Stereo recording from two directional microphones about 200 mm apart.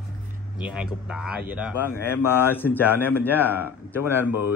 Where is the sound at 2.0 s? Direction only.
10° left (ahead or behind).